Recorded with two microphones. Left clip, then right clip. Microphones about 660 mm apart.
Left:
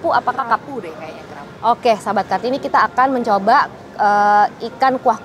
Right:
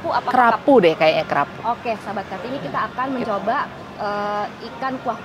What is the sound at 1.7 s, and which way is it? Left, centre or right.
Speech, left.